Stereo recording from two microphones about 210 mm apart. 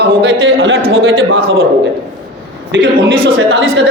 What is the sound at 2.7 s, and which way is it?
A man's voice, 60° right (ahead or behind).